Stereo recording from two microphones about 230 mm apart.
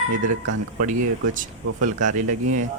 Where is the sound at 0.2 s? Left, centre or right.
Right.